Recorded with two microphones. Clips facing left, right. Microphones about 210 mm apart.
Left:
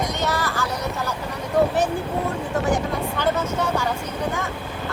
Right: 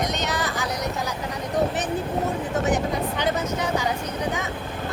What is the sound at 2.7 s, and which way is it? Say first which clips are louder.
Vehicle: even; 20° right (ahead or behind).